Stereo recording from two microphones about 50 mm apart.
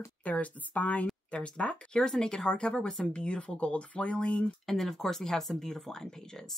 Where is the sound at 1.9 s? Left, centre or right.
Centre.